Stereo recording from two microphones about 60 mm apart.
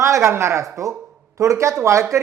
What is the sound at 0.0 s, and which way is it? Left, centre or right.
A man's voice, right.